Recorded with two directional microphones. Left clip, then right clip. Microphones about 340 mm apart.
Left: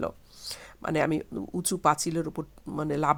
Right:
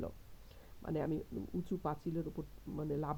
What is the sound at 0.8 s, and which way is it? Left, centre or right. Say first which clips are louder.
Speech: left 12 dB; centre.